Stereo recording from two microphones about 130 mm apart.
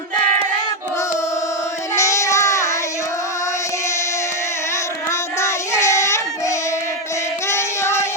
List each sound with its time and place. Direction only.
2.0 s child singing: 25° left (ahead or behind)
5.4 s child singing: 20° left (ahead or behind)